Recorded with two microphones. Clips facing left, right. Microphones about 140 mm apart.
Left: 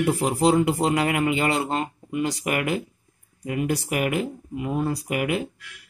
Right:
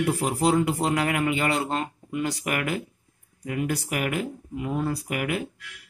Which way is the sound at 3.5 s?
10° left (ahead or behind).